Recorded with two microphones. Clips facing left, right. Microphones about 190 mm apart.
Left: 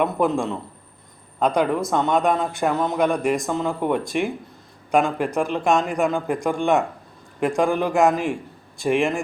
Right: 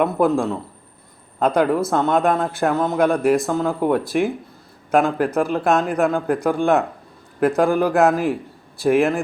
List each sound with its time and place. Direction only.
0.0 s speech: 5° right (ahead or behind)